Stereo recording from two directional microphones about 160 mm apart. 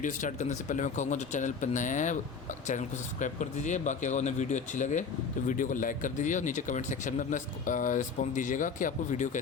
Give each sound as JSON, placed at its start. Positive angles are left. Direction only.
{"t": 0.0, "sound": "speech", "side_deg": 50}